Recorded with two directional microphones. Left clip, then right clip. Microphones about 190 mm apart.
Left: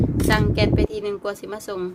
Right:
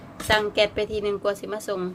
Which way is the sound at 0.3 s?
10° left (ahead or behind).